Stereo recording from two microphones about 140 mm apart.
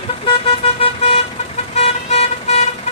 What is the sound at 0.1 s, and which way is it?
Vehicle, 40° left (ahead or behind).